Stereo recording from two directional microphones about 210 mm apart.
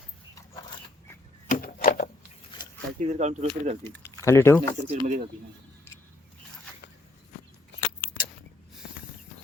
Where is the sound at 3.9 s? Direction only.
10° left (ahead or behind).